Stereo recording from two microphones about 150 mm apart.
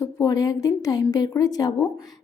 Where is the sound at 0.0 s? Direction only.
25° left (ahead or behind).